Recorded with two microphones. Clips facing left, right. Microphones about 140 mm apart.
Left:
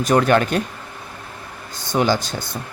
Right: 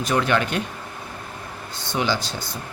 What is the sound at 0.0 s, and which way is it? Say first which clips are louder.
Speech: left 5 dB; 45° left (ahead or behind).